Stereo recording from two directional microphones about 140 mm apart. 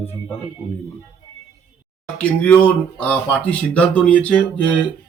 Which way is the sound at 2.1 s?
10° left (ahead or behind).